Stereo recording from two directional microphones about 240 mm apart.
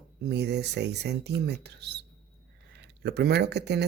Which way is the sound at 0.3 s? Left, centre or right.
Right.